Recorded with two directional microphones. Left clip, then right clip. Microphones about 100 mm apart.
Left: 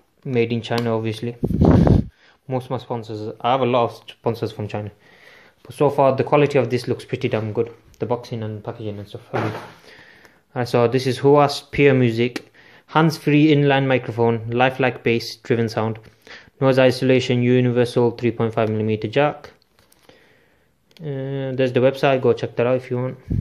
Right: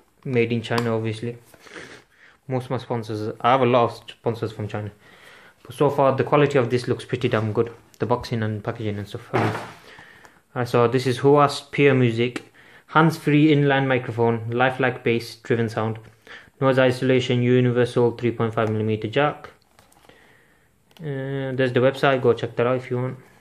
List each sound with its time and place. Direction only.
0.3 s speech: 25° left (ahead or behind)
0.7 s speech: 40° left (ahead or behind)
2.4 s speech: 15° left (ahead or behind)
2.7 s speech: centre (ahead or behind)
4.2 s speech: 45° left (ahead or behind); by 8.3 s 10° right (ahead or behind)
8.3 s speech: 25° right (ahead or behind)
9.8 s a sound: 25° left (ahead or behind)
10.5 s speech: 25° left (ahead or behind)
21.0 s speech: 20° left (ahead or behind)